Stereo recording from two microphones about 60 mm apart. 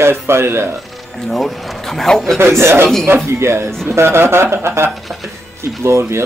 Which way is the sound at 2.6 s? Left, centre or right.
Right.